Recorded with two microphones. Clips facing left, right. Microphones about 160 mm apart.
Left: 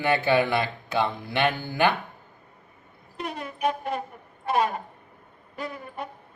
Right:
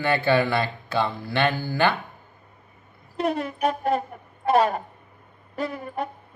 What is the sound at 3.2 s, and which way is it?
Speech, 40° right (ahead or behind).